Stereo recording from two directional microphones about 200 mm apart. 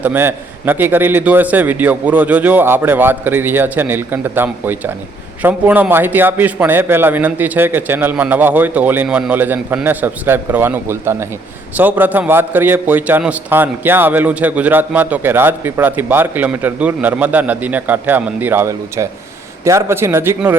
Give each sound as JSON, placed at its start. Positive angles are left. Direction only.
{"t": 0.0, "sound": "a man's voice", "side_deg": -10}